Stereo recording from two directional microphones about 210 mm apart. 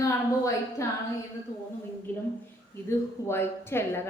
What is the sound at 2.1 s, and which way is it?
Speech, 10° left (ahead or behind).